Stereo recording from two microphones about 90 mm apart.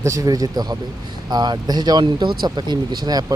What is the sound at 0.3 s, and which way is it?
Speech, 45° right (ahead or behind).